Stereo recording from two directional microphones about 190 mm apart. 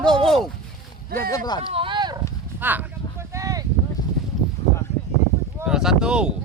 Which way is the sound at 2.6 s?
10° right (ahead or behind).